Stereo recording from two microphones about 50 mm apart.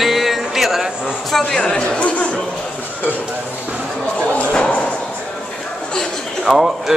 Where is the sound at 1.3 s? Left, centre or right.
Centre.